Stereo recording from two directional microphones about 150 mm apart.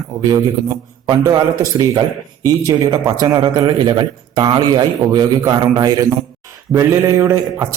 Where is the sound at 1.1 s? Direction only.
25° right (ahead or behind).